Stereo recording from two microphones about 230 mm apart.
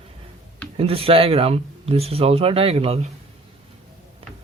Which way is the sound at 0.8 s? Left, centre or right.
Right.